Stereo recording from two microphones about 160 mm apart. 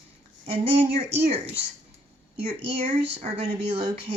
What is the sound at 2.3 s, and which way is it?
Speech, 35° right (ahead or behind).